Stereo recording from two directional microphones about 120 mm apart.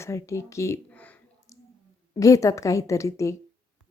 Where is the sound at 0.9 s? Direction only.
10° left (ahead or behind).